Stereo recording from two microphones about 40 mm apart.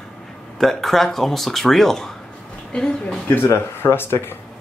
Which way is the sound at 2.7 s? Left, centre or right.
Left.